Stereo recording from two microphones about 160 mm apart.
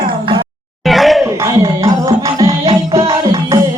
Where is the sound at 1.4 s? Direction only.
20° right (ahead or behind).